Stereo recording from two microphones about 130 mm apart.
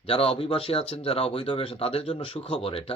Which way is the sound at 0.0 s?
45° left (ahead or behind).